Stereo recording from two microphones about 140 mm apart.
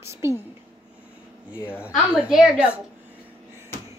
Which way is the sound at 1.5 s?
15° left (ahead or behind).